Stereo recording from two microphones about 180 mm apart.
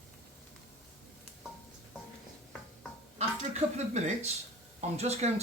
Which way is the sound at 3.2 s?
40° right (ahead or behind).